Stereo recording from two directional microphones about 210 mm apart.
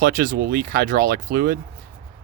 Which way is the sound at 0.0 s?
45° right (ahead or behind).